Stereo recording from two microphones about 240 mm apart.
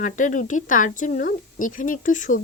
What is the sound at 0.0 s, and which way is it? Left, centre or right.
Speech, left.